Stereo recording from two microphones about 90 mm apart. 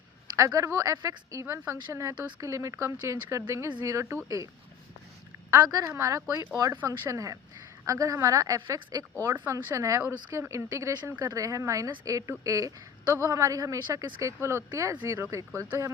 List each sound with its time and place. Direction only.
0.3 s a woman's voice: 40° right (ahead or behind)
5.6 s a woman's voice: 40° right (ahead or behind)